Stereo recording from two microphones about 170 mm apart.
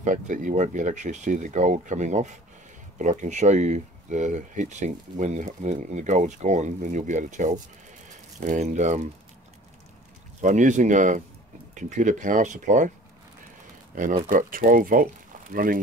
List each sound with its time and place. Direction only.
0.0 s speech: 50° right (ahead or behind)
10.4 s speech: 45° right (ahead or behind)
14.3 s speech: 55° right (ahead or behind)